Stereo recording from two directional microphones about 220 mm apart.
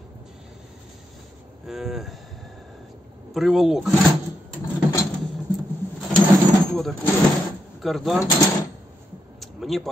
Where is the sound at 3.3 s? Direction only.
Centre (ahead or behind).